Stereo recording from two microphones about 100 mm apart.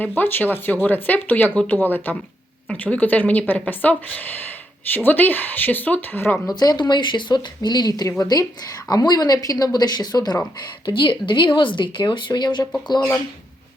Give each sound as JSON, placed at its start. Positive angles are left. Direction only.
{"t": 0.2, "sound": "speech", "side_deg": 20}
{"t": 6.6, "sound": "speech", "side_deg": 40}
{"t": 10.8, "sound": "speech", "side_deg": 55}